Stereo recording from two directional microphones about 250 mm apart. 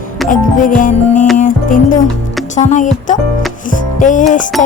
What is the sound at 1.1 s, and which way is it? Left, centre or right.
Music, centre.